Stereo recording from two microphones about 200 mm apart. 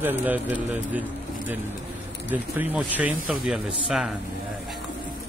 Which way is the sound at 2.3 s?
10° right (ahead or behind).